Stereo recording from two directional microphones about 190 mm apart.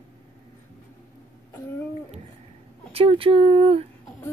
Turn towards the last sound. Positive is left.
turn(degrees=-30)  # may be behind; listen again after turning